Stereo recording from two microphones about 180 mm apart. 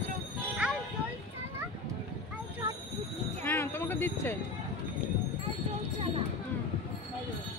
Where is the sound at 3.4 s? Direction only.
10° left (ahead or behind).